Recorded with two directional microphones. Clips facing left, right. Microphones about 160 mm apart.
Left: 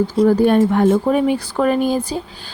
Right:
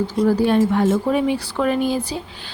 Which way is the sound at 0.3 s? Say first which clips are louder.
Left 2 dB; 50° left (ahead or behind).